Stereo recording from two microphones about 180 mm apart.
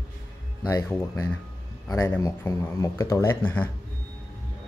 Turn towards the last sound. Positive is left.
turn(degrees=10)  # may be behind; listen again after turning